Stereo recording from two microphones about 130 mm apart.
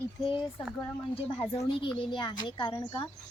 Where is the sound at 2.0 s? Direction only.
35° left (ahead or behind).